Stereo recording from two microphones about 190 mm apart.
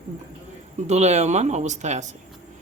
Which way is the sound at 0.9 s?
35° right (ahead or behind).